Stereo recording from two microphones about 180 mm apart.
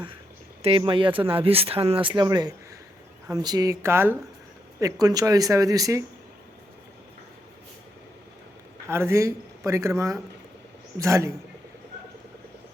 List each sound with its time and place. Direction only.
0.6 s speech: 30° right (ahead or behind)
8.9 s speech: 15° right (ahead or behind)